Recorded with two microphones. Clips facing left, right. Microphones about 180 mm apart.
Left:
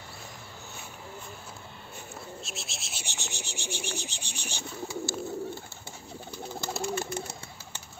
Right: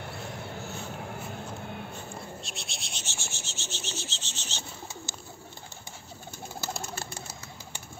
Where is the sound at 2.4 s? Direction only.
Centre (ahead or behind).